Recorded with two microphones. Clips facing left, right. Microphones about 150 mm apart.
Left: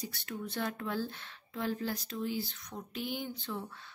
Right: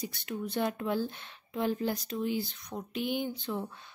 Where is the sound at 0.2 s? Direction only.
15° right (ahead or behind).